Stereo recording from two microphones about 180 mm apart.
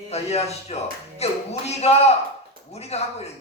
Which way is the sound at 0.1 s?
35° left (ahead or behind).